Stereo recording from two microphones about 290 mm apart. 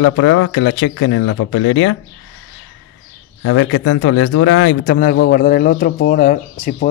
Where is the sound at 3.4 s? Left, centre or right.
Left.